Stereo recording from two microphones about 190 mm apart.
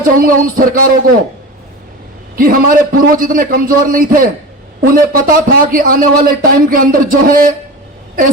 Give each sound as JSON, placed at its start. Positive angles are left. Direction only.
{"t": 0.2, "sound": "speech", "side_deg": -45}
{"t": 2.3, "sound": "speech", "side_deg": -50}